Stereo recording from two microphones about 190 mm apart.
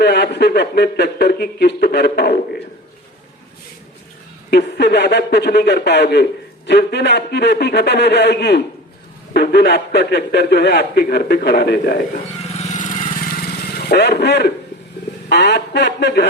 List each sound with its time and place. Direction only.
0.0 s a man's voice: 65° left (ahead or behind)
4.5 s a man's voice: 65° left (ahead or behind)
12.5 s vehicle: 35° left (ahead or behind)
13.3 s vehicle: 55° left (ahead or behind)
15.3 s a man's voice: 65° left (ahead or behind)